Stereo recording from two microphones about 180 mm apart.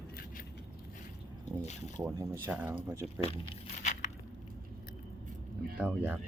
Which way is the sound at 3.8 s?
40° left (ahead or behind).